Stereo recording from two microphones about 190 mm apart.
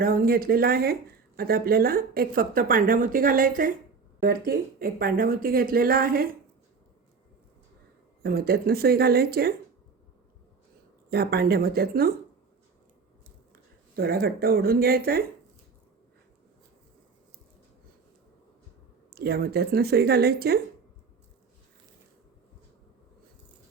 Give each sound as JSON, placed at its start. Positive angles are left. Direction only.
{"t": 0.0, "sound": "speech", "side_deg": -50}
{"t": 8.2, "sound": "speech", "side_deg": -55}
{"t": 11.1, "sound": "speech", "side_deg": -55}
{"t": 13.9, "sound": "speech", "side_deg": -55}
{"t": 19.1, "sound": "speech", "side_deg": -55}